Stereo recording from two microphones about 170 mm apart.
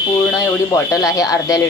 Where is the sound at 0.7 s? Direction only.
20° left (ahead or behind).